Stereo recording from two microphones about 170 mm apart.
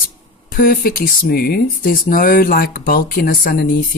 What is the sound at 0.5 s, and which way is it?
Speech, 55° left (ahead or behind).